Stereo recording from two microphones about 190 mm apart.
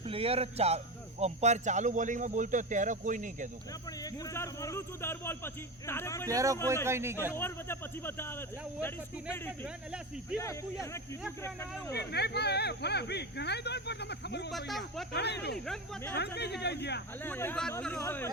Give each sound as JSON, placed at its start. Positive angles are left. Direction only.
{"t": 0.0, "sound": "speech", "side_deg": -30}
{"t": 4.0, "sound": "speech", "side_deg": 15}
{"t": 6.2, "sound": "speech", "side_deg": -15}
{"t": 7.3, "sound": "speech", "side_deg": 10}
{"t": 11.9, "sound": "speech", "side_deg": 60}
{"t": 14.5, "sound": "speech", "side_deg": 0}
{"t": 15.1, "sound": "speech", "side_deg": 60}
{"t": 15.6, "sound": "speech", "side_deg": 0}
{"t": 16.1, "sound": "speech", "side_deg": 60}
{"t": 17.2, "sound": "speech", "side_deg": 10}